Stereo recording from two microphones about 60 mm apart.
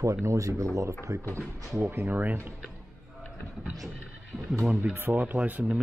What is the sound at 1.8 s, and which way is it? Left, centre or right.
Speech, right.